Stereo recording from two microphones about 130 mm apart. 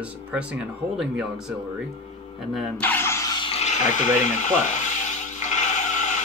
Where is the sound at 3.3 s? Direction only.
40° left (ahead or behind).